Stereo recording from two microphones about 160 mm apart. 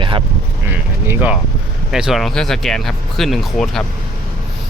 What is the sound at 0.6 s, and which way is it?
Speech, 10° right (ahead or behind).